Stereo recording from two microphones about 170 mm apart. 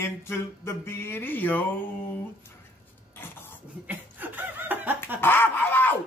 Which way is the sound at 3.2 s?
15° left (ahead or behind).